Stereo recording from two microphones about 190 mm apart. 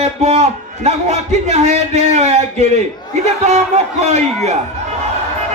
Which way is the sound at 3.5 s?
35° right (ahead or behind).